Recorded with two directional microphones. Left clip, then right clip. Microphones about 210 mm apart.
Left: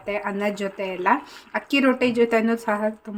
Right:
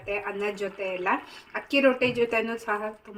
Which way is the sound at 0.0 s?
45° left (ahead or behind).